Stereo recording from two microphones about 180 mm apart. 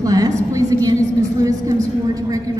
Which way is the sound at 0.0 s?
20° right (ahead or behind).